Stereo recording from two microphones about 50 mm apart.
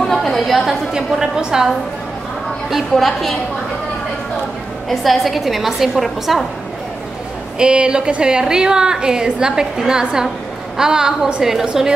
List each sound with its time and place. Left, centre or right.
0.0 s chatter: centre
0.9 s a woman's voice: centre
2.9 s a woman's voice: centre
4.8 s a woman's voice: centre
7.5 s a woman's voice: centre